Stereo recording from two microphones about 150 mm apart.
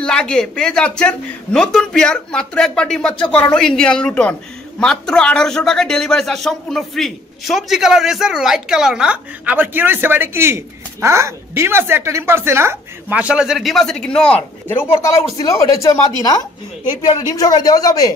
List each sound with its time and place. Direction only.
0.0 s a man's voice: 5° left (ahead or behind); by 18.1 s 25° left (ahead or behind)